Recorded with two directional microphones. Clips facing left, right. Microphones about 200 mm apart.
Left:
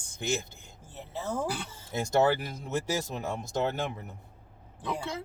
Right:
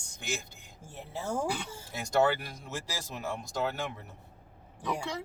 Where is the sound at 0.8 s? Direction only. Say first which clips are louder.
Left 1 dB; 10° right (ahead or behind).